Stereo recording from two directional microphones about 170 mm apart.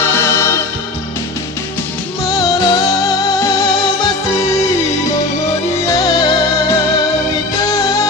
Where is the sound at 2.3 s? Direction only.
20° left (ahead or behind).